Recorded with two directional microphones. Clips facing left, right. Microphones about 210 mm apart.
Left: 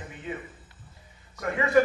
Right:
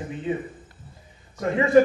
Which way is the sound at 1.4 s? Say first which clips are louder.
Right 6 dB; 25° right (ahead or behind).